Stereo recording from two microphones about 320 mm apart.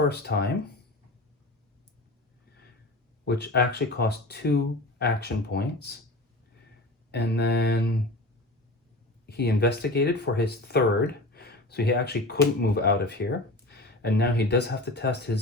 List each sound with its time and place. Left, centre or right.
0.1 s speech: left
3.2 s speech: left
7.1 s speech: left
9.2 s speech: left